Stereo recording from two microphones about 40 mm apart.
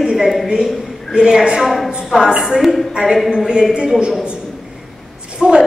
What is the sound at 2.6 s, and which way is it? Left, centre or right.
Speech, centre.